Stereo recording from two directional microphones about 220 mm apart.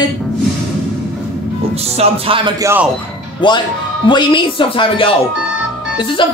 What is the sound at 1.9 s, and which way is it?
Music, 25° right (ahead or behind).